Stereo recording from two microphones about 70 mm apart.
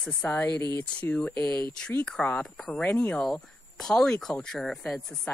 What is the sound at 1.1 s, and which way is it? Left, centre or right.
Speech, centre.